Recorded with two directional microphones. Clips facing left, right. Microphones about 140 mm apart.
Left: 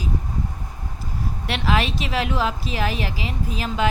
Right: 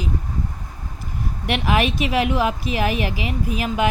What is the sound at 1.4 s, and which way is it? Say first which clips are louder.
Speech: right 3 dB; 15° right (ahead or behind).